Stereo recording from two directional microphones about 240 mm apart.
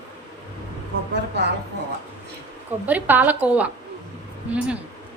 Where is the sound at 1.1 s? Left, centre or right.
Right.